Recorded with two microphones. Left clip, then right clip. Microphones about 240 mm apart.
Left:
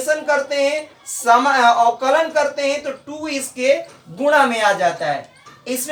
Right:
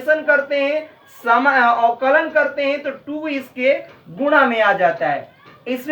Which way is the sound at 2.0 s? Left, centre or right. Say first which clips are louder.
Right 1 dB; left.